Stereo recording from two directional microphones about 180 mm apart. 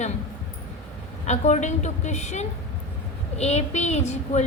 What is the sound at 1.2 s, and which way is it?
A child's voice, 40° left (ahead or behind).